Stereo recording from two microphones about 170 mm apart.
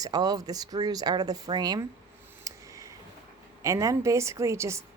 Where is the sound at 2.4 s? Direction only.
20° right (ahead or behind).